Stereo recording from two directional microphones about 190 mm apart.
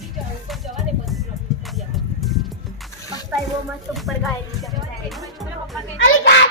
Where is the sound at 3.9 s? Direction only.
Centre (ahead or behind).